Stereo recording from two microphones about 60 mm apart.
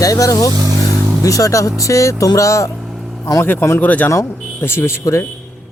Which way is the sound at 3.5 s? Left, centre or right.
Left.